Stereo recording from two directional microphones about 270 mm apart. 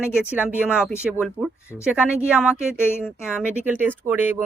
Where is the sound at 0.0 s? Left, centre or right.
Centre.